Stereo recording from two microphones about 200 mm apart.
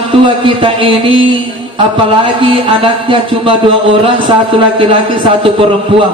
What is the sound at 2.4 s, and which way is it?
Speech, 25° right (ahead or behind).